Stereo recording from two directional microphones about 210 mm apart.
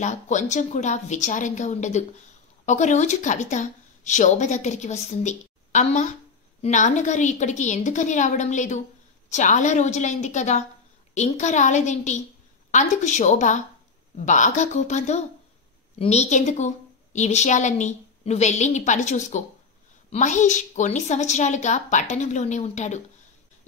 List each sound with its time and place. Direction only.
0.0 s speech: 35° left (ahead or behind)